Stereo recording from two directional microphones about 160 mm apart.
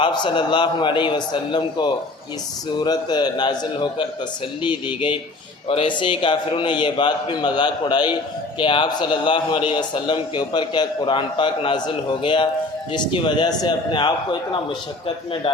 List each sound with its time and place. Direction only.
0.0 s a man's voice: 30° left (ahead or behind)